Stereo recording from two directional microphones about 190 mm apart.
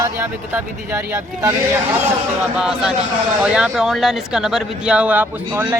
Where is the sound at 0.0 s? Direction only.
10° right (ahead or behind).